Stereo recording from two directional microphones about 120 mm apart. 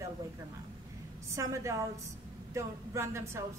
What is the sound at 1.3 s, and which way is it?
Speech, 25° right (ahead or behind).